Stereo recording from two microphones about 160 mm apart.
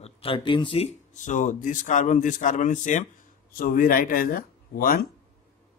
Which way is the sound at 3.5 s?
65° left (ahead or behind).